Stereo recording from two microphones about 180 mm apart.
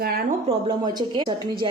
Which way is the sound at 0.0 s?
55° right (ahead or behind).